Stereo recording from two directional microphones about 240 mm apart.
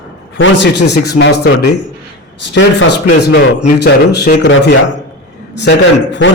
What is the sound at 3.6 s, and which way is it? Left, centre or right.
Speech, left.